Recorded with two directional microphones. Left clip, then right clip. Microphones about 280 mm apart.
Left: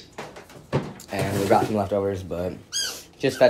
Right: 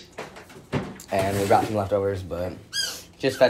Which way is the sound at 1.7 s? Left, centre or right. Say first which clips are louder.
Even; centre.